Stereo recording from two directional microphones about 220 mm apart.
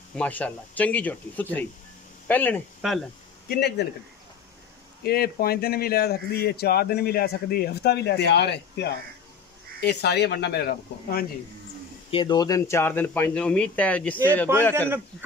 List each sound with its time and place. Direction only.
0.1 s speech: 5° left (ahead or behind)
3.4 s speech: 50° left (ahead or behind)
5.0 s speech: 45° left (ahead or behind)
12.1 s speech: 20° left (ahead or behind)
14.5 s a man's voice: 10° right (ahead or behind)